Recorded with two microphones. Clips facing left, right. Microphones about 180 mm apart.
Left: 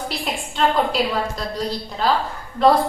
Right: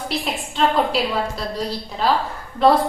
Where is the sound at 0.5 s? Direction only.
Centre (ahead or behind).